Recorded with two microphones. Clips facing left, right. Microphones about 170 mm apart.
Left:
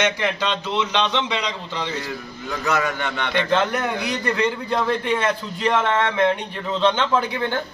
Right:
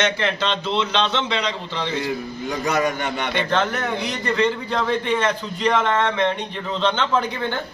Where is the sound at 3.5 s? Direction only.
10° left (ahead or behind).